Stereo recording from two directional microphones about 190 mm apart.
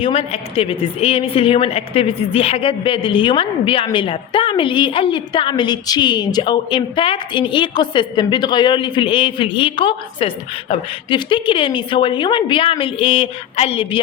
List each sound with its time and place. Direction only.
0.0 s a woman's voice: 30° left (ahead or behind)